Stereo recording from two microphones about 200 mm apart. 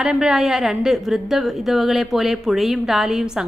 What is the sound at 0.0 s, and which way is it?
A woman's voice, 5° right (ahead or behind).